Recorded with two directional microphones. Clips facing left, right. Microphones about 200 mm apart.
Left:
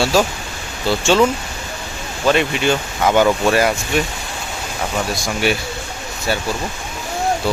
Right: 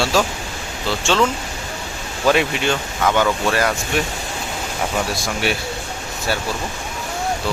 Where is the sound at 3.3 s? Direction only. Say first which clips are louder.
Left 4 dB; 15° left (ahead or behind).